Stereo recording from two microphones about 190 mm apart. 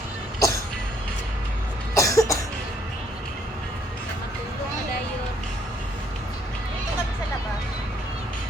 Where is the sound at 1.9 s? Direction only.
15° left (ahead or behind).